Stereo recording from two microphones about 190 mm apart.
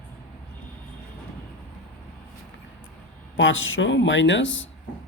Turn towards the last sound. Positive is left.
turn(degrees=75)  # may be behind; listen again after turning